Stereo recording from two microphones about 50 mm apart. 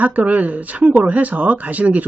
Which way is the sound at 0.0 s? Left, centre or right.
Right.